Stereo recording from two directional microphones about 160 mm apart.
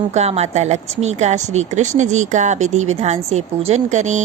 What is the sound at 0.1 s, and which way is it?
A woman's voice, 40° right (ahead or behind).